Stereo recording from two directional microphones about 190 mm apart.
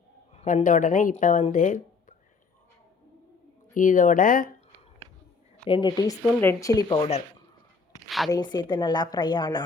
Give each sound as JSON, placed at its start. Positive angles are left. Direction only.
{"t": 0.3, "sound": "speech", "side_deg": 45}
{"t": 1.5, "sound": "a sound", "side_deg": 45}
{"t": 3.8, "sound": "speech", "side_deg": 45}
{"t": 5.6, "sound": "a woman's voice", "side_deg": 25}
{"t": 8.0, "sound": "a sound", "side_deg": 0}
{"t": 8.3, "sound": "a woman's voice", "side_deg": 25}